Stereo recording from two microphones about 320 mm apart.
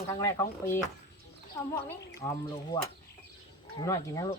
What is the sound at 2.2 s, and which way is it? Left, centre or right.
Speech, centre.